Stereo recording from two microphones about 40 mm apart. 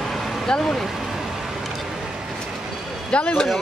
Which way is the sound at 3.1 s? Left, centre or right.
Left.